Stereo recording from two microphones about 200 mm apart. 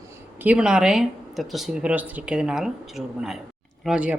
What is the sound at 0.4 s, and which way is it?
A woman's voice, 5° right (ahead or behind).